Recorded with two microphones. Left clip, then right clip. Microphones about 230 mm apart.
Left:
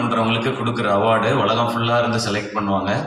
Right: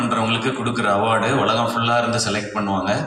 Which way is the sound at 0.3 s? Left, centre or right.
Right.